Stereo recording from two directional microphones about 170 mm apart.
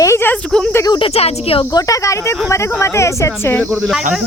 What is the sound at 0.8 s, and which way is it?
Speech, 25° left (ahead or behind).